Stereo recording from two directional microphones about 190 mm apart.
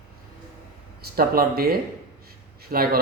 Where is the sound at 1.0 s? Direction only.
50° right (ahead or behind).